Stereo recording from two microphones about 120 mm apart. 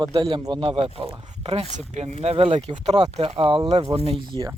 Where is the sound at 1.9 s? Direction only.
60° right (ahead or behind).